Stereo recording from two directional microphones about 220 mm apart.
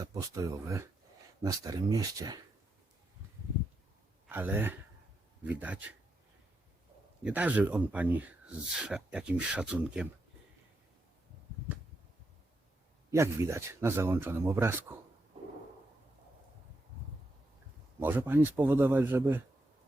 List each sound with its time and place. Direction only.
0.0 s speech: 15° right (ahead or behind)
4.3 s speech: 10° right (ahead or behind)
7.2 s speech: 5° right (ahead or behind)
13.1 s speech: 10° right (ahead or behind)
18.0 s speech: 10° right (ahead or behind)